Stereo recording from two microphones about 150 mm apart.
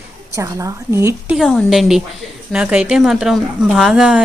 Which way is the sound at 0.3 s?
20° right (ahead or behind).